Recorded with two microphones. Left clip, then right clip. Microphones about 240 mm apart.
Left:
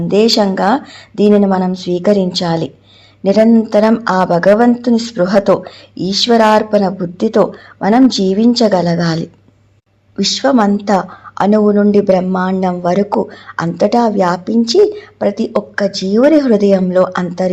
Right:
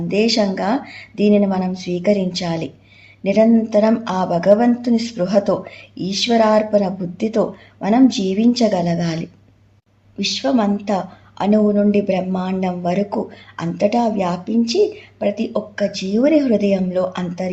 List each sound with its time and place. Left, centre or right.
0.1 s speech: left